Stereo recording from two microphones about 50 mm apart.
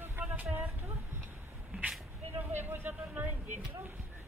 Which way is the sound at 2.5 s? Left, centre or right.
Right.